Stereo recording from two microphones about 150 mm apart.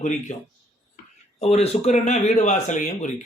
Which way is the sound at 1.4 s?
45° left (ahead or behind).